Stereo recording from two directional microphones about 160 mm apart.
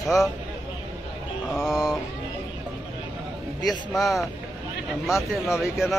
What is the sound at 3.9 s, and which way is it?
Speech, centre (ahead or behind).